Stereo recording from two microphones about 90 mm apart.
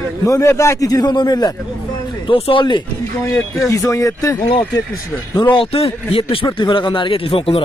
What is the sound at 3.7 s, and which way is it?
Speech, 35° left (ahead or behind).